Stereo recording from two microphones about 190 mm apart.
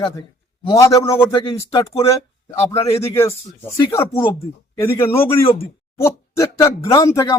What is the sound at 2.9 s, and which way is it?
Speech, 15° left (ahead or behind).